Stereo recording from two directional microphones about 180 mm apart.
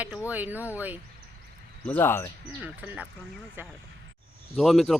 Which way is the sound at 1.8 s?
10° left (ahead or behind).